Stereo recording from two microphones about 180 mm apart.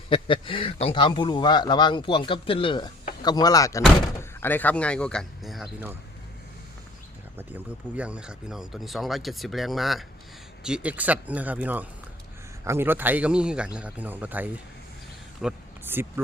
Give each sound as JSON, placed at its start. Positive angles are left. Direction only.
{"t": 0.1, "sound": "speech", "side_deg": 30}
{"t": 7.3, "sound": "speech", "side_deg": -10}
{"t": 15.4, "sound": "a sound", "side_deg": -5}